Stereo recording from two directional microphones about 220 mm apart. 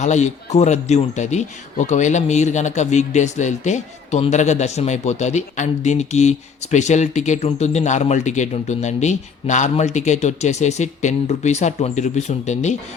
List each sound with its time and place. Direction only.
0.0 s a man's voice: 30° left (ahead or behind)